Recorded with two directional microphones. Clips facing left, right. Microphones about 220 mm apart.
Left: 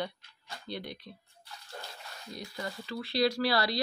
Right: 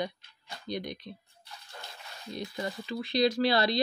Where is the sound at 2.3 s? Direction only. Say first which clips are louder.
Right 4 dB; 20° right (ahead or behind).